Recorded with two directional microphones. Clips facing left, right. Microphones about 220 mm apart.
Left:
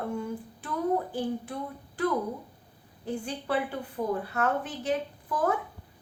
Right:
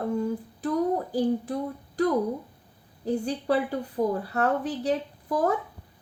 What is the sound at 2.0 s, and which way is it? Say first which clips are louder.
A woman's voice: right 4 dB; 40° right (ahead or behind).